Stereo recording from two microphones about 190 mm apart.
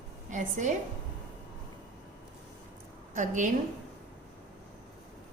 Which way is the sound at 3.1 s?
40° right (ahead or behind).